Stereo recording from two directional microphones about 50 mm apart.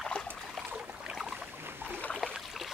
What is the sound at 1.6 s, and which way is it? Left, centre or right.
Boat, right.